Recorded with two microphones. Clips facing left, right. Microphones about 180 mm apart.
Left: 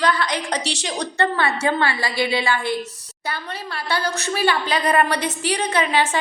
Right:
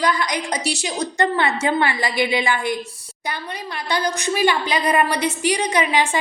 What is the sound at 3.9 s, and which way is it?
A woman's voice, 15° right (ahead or behind).